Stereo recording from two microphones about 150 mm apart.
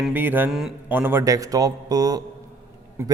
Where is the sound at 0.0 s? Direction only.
10° right (ahead or behind).